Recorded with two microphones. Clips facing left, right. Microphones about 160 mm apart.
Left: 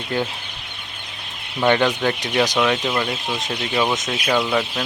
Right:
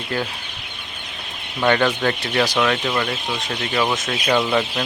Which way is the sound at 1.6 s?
15° left (ahead or behind).